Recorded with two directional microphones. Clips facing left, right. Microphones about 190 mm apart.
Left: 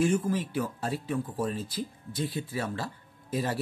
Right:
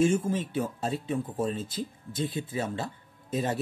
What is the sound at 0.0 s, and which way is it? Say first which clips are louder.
Speech: right 1 dB; 25° right (ahead or behind).